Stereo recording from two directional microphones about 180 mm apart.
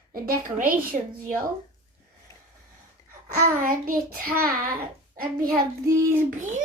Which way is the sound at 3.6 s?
50° right (ahead or behind).